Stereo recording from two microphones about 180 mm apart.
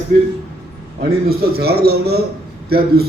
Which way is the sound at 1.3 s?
60° right (ahead or behind).